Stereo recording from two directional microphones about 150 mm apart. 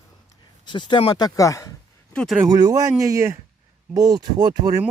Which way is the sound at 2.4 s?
25° right (ahead or behind).